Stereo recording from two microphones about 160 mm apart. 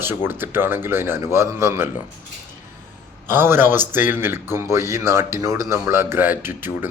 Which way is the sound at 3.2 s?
15° right (ahead or behind).